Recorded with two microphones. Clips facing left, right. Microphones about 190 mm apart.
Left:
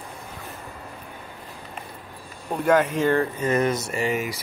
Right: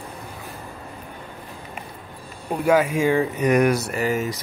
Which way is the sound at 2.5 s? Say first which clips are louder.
Right 1 dB; 10° right (ahead or behind).